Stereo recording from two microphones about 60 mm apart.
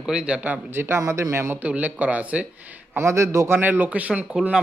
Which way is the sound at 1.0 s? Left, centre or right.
Right.